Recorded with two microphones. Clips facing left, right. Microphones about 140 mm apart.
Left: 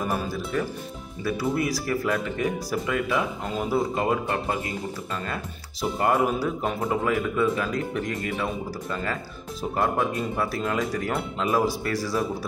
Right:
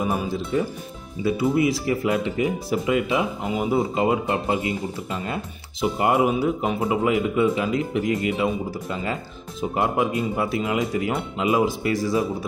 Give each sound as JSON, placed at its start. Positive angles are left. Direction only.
{"t": 0.0, "sound": "speech", "side_deg": -15}
{"t": 3.4, "sound": "speech", "side_deg": -5}
{"t": 3.9, "sound": "speech", "side_deg": -20}
{"t": 11.6, "sound": "speech", "side_deg": -20}